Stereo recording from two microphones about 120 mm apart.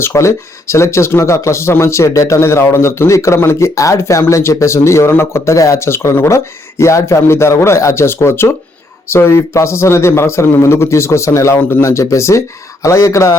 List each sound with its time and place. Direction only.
0.0 s speech: 25° left (ahead or behind)